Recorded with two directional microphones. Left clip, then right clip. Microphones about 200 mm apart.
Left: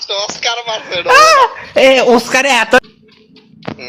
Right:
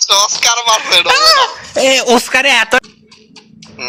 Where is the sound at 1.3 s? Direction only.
25° left (ahead or behind).